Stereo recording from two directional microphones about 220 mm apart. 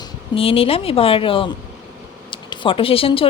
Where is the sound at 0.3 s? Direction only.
25° left (ahead or behind).